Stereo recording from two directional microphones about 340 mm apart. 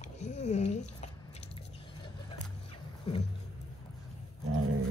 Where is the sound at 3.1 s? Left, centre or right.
Centre.